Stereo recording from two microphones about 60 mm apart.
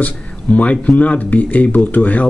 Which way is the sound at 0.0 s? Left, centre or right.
Left.